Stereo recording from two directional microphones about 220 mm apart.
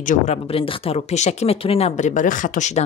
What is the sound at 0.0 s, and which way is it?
Speech, 35° left (ahead or behind).